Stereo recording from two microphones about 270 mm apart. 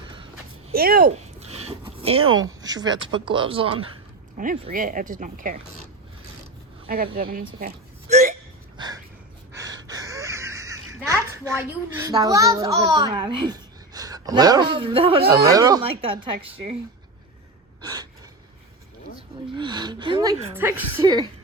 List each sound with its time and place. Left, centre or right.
0.7 s zipper: right
2.2 s speech: right
2.6 s speech: centre; by 5.5 s right
6.8 s a woman's voice: right
8.1 s hiccup: right
8.8 s a sound: centre
12.0 s a child's voice: centre
17.8 s gasp: centre
19.5 s a woman's voice: centre